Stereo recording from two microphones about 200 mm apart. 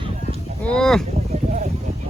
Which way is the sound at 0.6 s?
5° left (ahead or behind).